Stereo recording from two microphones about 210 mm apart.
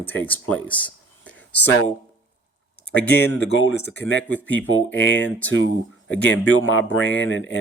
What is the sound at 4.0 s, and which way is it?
Speech, 10° left (ahead or behind).